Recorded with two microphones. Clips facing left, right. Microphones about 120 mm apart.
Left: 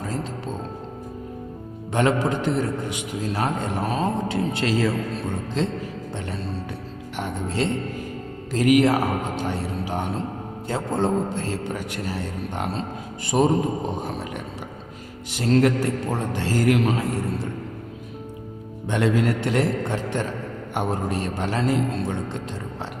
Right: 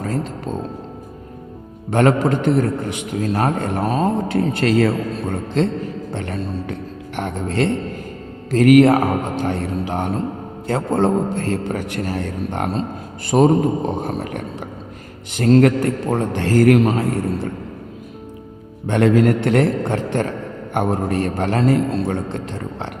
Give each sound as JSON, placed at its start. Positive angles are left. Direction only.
{"t": 0.0, "sound": "speech", "side_deg": -55}
{"t": 1.9, "sound": "a man's voice", "side_deg": -55}
{"t": 3.8, "sound": "a man's voice", "side_deg": -40}
{"t": 6.1, "sound": "music", "side_deg": -65}
{"t": 7.2, "sound": "a man's voice", "side_deg": -60}
{"t": 14.1, "sound": "a man's voice", "side_deg": -45}
{"t": 15.6, "sound": "a man's voice", "side_deg": -55}
{"t": 18.9, "sound": "a man's voice", "side_deg": -55}